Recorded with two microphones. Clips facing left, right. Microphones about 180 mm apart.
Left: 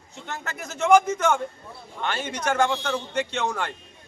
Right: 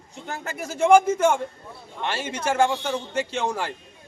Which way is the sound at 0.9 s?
30° right (ahead or behind).